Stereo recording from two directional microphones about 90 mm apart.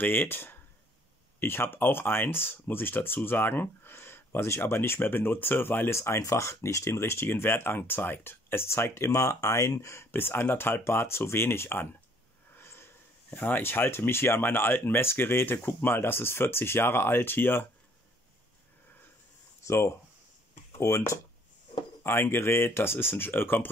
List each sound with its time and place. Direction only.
0.0 s speech: 20° left (ahead or behind)
19.6 s speech: 35° left (ahead or behind)